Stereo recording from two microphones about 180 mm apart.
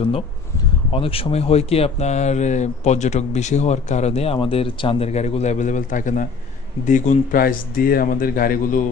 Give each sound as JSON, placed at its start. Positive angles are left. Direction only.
{"t": 0.9, "sound": "speech", "side_deg": 30}